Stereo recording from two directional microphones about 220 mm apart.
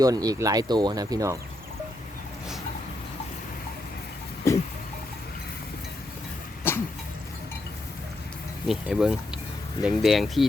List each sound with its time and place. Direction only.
0.0 s speech: 15° right (ahead or behind)
4.4 s a sound: 15° left (ahead or behind)
6.6 s cough: 10° left (ahead or behind)
8.6 s speech: centre (ahead or behind)